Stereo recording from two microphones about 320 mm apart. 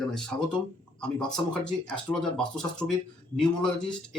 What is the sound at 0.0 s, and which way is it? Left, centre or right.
Speech, centre.